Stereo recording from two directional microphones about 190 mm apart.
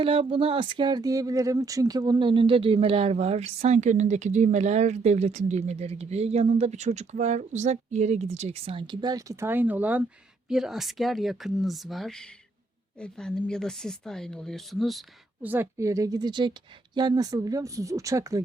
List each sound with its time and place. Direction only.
0.0 s speech: 30° right (ahead or behind)